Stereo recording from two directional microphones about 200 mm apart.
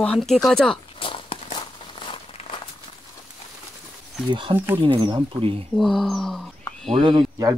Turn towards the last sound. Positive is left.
turn(degrees=-20)  # may be behind; listen again after turning